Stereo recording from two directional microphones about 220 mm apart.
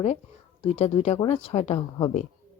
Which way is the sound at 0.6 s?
30° left (ahead or behind).